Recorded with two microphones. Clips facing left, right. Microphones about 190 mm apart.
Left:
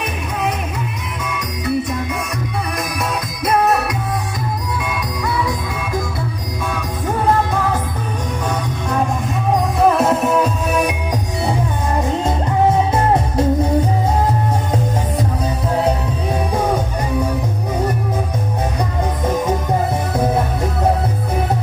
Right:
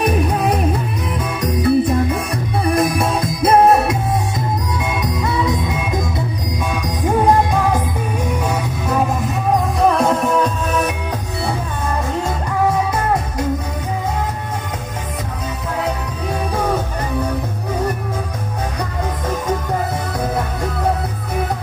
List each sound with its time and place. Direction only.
0.0 s music: 35° right (ahead or behind)
7.2 s music: 15° right (ahead or behind)
9.8 s music: 5° left (ahead or behind)